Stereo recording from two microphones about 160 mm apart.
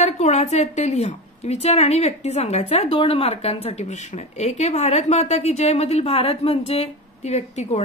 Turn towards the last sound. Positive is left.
turn(degrees=45)  # may be behind; listen again after turning